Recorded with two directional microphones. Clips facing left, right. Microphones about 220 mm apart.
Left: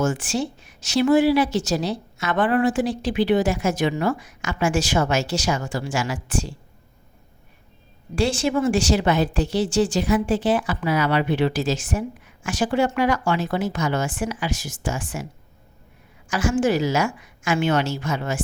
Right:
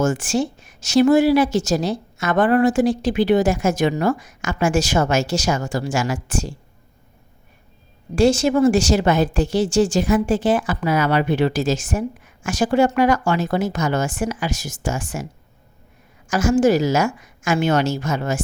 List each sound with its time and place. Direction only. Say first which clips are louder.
0.0 s a woman's voice: right 3 dB; 45° right (ahead or behind)
8.1 s a woman's voice: right 5 dB; 45° right (ahead or behind)
16.3 s a woman's voice: right 5 dB; 40° right (ahead or behind)